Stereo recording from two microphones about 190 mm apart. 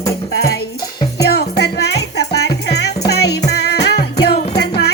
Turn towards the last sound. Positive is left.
turn(degrees=60)  # may be behind; listen again after turning